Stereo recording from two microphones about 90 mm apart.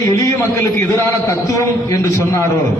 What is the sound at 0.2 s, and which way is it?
A man's voice, 35° left (ahead or behind).